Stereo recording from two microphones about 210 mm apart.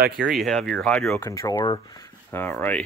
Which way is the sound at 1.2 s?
15° left (ahead or behind).